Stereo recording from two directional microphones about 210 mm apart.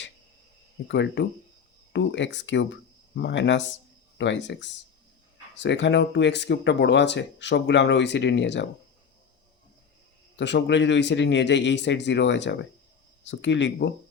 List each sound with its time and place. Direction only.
0.9 s speech: 60° left (ahead or behind)
10.3 s speech: 55° left (ahead or behind)